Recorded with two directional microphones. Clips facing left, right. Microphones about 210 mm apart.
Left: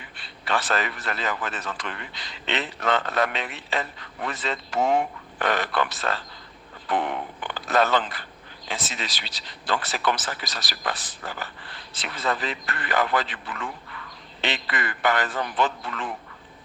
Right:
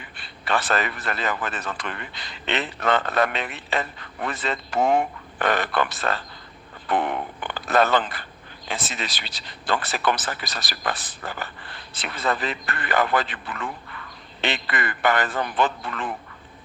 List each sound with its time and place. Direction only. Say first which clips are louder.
0.0 s a man's voice: right 2 dB; 55° right (ahead or behind)